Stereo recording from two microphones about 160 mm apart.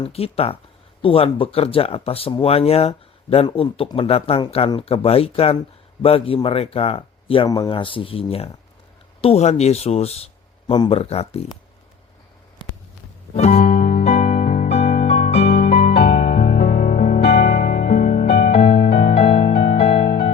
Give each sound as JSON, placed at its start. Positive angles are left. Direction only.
{"t": 0.0, "sound": "speech", "side_deg": 40}
{"t": 7.4, "sound": "speech", "side_deg": 25}
{"t": 13.3, "sound": "music", "side_deg": 40}
{"t": 16.4, "sound": "music", "side_deg": 55}
{"t": 17.5, "sound": "music", "side_deg": 70}
{"t": 18.3, "sound": "music", "side_deg": 40}
{"t": 18.7, "sound": "music", "side_deg": 75}